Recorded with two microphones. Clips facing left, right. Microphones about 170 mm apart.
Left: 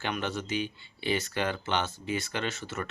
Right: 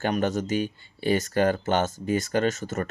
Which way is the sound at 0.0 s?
45° right (ahead or behind).